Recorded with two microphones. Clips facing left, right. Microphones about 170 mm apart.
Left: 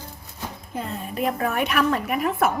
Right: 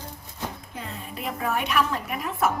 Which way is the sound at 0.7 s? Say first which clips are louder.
Left 6 dB; 50° left (ahead or behind).